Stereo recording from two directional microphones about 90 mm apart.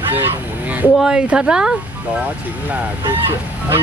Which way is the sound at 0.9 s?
10° right (ahead or behind).